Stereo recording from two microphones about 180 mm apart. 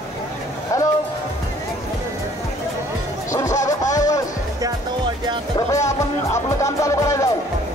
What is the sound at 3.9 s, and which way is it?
Music, 20° left (ahead or behind).